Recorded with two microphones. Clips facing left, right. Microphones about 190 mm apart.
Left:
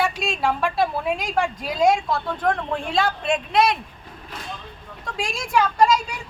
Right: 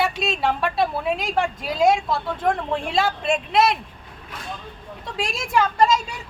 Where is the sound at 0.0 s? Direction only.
Centre (ahead or behind).